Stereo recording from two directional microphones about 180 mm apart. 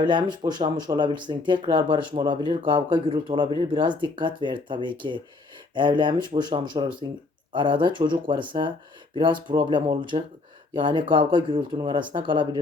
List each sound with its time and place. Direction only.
0.0 s speech: 25° right (ahead or behind)